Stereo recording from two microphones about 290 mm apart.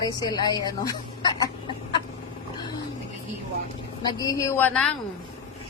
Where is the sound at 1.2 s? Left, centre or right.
Centre.